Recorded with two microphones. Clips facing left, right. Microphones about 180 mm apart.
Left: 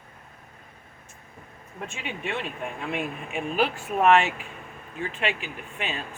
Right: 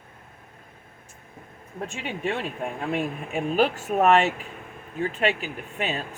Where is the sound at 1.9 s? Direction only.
40° right (ahead or behind).